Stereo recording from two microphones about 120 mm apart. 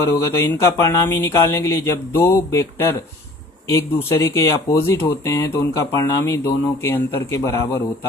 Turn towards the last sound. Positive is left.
turn(degrees=25)  # may be behind; listen again after turning